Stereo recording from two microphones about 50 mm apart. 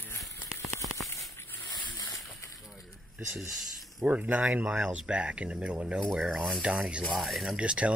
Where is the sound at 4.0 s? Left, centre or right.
Right.